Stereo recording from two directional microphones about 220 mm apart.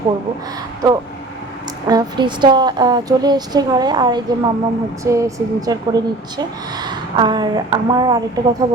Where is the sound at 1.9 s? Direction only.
20° right (ahead or behind).